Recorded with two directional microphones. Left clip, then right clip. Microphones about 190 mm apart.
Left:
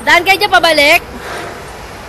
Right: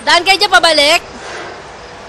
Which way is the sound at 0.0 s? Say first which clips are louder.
Left 1 dB; 15° right (ahead or behind).